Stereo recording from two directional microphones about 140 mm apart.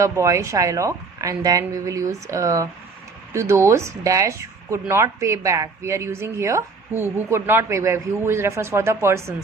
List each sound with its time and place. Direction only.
0.0 s speech: 20° right (ahead or behind)